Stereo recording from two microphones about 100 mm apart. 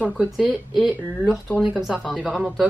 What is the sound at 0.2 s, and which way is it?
Speech, 5° right (ahead or behind).